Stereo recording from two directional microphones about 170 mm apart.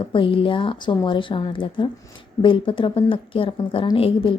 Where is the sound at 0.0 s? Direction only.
30° left (ahead or behind).